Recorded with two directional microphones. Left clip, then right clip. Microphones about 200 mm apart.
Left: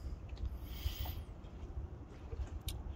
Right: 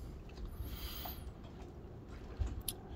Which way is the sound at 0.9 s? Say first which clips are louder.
Right 2 dB; 20° left (ahead or behind).